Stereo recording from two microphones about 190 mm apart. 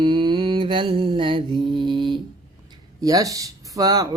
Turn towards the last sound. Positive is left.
turn(degrees=-20)  # may be behind; listen again after turning